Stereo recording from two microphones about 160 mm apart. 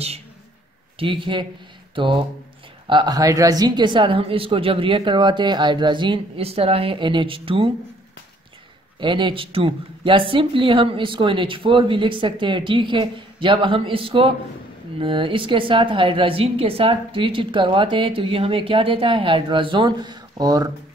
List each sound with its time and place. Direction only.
0.9 s a woman's voice: 35° right (ahead or behind)
9.0 s a woman's voice: 30° right (ahead or behind)